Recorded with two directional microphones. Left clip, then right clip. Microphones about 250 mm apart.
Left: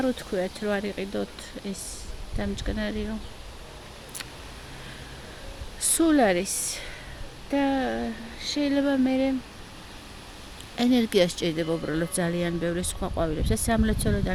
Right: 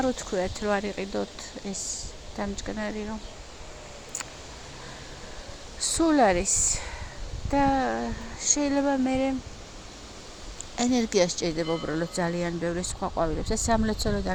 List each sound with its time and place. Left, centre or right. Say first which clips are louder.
0.0 s speech: even; centre
2.4 s speech: left 1 dB; centre
5.9 s a woman's voice: even; left
7.5 s speech: right 2 dB; centre
10.8 s a woman's voice: left 2 dB; left